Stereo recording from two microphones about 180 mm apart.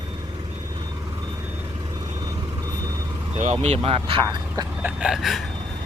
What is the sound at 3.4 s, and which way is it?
Speech, 40° right (ahead or behind).